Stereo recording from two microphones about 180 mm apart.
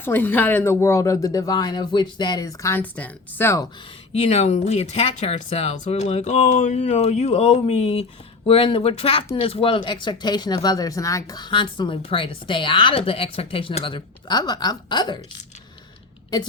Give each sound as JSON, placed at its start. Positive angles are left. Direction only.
{"t": 0.0, "sound": "speech", "side_deg": 10}
{"t": 4.1, "sound": "speech", "side_deg": 35}